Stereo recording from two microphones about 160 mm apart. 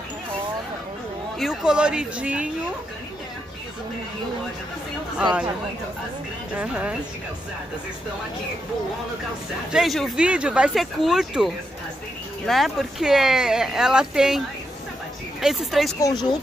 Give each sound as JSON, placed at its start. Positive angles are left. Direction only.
{"t": 1.4, "sound": "speech", "side_deg": -5}
{"t": 6.5, "sound": "speech", "side_deg": -5}
{"t": 9.7, "sound": "speech", "side_deg": 0}
{"t": 15.4, "sound": "speech", "side_deg": 0}
{"t": 16.0, "sound": "speech", "side_deg": 25}